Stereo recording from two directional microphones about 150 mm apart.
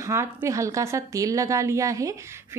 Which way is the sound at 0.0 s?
20° right (ahead or behind).